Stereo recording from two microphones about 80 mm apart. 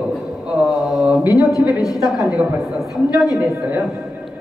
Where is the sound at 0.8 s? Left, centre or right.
Centre.